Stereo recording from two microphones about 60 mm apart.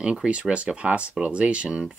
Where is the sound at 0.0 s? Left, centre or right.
Centre.